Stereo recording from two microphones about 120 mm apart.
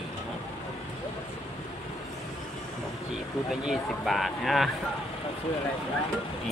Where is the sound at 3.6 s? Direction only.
Centre (ahead or behind).